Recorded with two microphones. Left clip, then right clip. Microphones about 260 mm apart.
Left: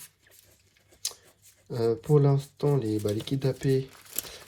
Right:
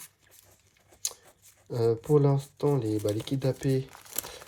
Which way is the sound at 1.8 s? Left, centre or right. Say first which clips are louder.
Even; right.